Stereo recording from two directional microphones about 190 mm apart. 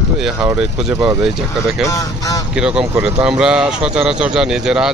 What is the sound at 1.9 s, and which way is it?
Speech, 15° left (ahead or behind).